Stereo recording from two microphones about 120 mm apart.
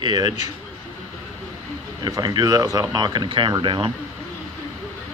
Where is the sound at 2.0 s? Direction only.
30° right (ahead or behind).